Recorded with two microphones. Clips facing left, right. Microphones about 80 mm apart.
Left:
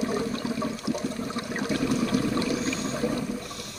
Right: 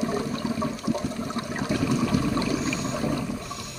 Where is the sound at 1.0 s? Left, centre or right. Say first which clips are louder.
Right 1 dB; right.